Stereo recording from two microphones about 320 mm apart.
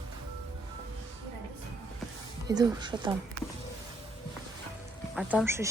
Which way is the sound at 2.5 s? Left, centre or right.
Centre.